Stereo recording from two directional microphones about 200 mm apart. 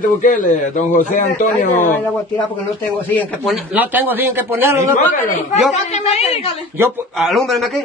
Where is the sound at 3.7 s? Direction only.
10° right (ahead or behind).